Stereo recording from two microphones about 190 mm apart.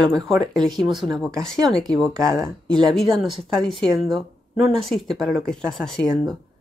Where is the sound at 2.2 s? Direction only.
15° right (ahead or behind).